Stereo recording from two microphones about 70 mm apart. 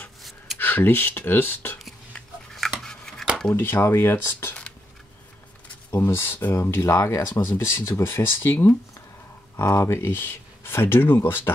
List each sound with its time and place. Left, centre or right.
0.6 s speech: left
2.5 s a sound: centre
3.5 s speech: left
5.9 s speech: left